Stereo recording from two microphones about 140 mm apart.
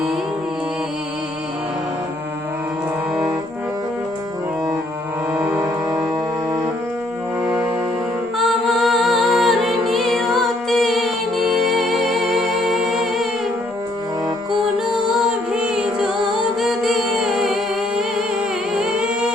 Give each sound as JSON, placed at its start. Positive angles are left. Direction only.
{"t": 5.3, "sound": "music", "side_deg": -10}
{"t": 5.5, "sound": "music", "side_deg": -25}
{"t": 7.4, "sound": "music", "side_deg": -10}
{"t": 14.8, "sound": "music", "side_deg": -5}